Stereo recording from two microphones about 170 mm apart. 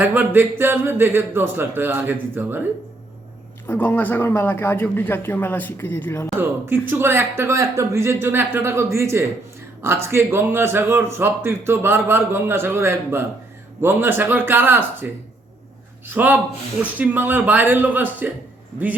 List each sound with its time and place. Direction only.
0.0 s a man's voice: 10° right (ahead or behind)
3.7 s speech: 10° left (ahead or behind)
6.7 s a man's voice: 15° right (ahead or behind)
16.0 s a man's voice: 10° right (ahead or behind)